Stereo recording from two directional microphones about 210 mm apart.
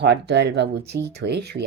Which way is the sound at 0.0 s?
55° right (ahead or behind).